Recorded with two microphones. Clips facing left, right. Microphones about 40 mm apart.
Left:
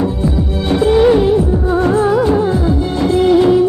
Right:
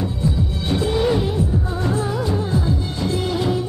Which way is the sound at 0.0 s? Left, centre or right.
Left.